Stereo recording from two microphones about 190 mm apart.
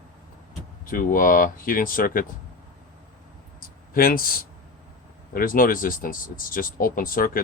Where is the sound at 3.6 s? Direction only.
50° left (ahead or behind).